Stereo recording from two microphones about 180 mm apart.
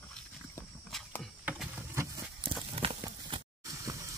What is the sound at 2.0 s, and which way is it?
Walk, 15° right (ahead or behind).